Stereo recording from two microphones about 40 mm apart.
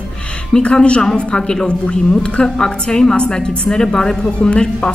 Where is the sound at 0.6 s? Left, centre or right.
Left.